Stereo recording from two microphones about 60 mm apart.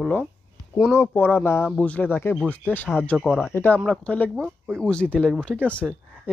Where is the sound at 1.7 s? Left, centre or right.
Left.